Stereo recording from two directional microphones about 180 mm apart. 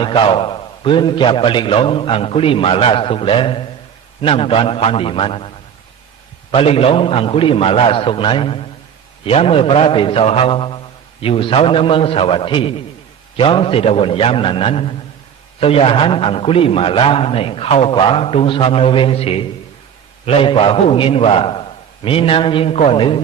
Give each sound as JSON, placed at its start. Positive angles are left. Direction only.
{"t": 0.0, "sound": "a man's voice", "side_deg": 30}
{"t": 6.5, "sound": "a man's voice", "side_deg": 30}